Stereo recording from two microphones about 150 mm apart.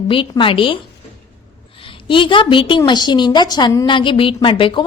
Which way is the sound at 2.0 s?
35° left (ahead or behind).